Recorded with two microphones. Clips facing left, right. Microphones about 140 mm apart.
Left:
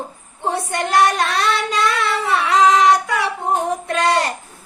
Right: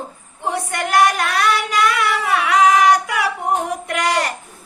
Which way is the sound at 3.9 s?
25° left (ahead or behind).